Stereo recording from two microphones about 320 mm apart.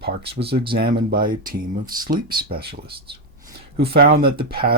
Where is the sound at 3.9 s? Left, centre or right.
Right.